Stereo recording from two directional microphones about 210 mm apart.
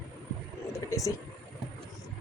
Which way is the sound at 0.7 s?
15° left (ahead or behind).